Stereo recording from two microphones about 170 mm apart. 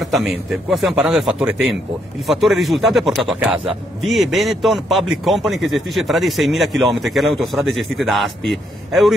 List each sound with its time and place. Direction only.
0.0 s speech: centre (ahead or behind)